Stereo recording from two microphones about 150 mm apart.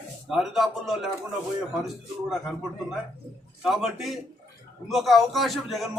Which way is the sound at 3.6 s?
Centre (ahead or behind).